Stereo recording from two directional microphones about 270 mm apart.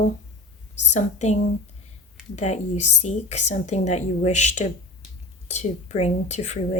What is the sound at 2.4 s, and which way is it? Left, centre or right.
Speech, left.